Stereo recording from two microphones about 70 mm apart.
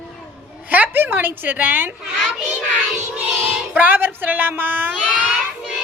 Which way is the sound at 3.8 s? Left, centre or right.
Right.